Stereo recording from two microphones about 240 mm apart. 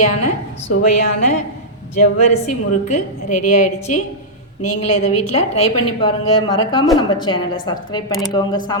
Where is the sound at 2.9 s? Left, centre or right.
Left.